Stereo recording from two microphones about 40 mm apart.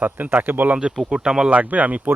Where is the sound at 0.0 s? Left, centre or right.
Right.